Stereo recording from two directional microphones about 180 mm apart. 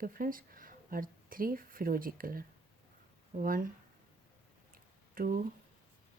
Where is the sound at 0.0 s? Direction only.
50° right (ahead or behind).